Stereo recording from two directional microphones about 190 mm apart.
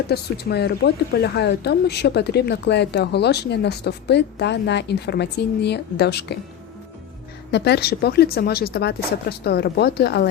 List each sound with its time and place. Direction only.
0.1 s speech: 60° left (ahead or behind)
7.5 s speech: 60° left (ahead or behind)